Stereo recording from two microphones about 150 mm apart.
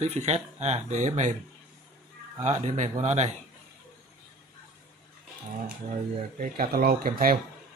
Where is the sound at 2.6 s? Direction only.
55° right (ahead or behind).